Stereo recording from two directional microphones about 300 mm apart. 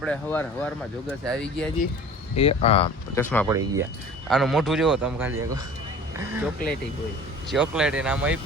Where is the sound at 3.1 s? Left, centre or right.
Centre.